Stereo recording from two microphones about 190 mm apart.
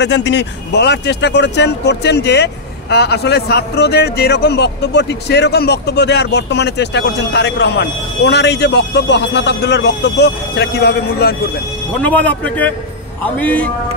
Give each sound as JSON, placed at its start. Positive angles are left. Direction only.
{"t": 0.0, "sound": "a man's voice", "side_deg": 65}
{"t": 12.0, "sound": "a man's voice", "side_deg": 10}